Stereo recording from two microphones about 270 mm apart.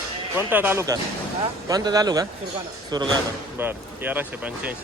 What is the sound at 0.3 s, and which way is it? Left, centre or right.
Speech, centre.